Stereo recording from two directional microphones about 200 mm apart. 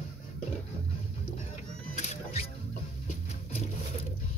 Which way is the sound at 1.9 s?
35° left (ahead or behind).